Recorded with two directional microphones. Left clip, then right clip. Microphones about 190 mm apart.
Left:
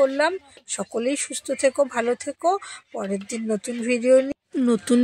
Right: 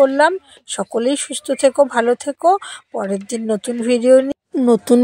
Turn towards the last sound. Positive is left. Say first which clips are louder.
# right 8 dB
turn(degrees=-25)  # may be behind; listen again after turning